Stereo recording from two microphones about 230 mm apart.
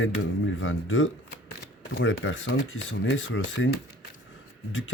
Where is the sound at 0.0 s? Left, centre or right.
Left.